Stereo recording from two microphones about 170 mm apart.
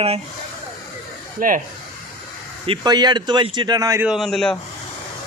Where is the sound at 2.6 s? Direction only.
30° right (ahead or behind).